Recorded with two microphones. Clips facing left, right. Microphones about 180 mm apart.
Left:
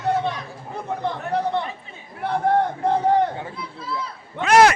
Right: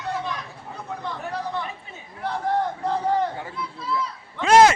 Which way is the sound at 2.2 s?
55° left (ahead or behind).